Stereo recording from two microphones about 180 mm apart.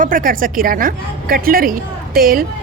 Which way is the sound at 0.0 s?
50° right (ahead or behind).